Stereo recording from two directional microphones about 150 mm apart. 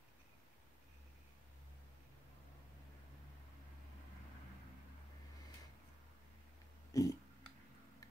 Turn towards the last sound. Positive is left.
turn(degrees=25)  # may be behind; listen again after turning